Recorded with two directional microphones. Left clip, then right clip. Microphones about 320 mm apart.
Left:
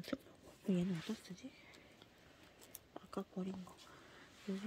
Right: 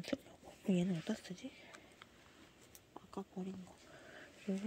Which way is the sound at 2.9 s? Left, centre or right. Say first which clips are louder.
Left 2 dB; centre.